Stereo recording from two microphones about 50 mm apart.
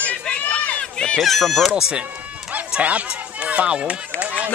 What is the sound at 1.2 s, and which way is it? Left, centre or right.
Speech, centre.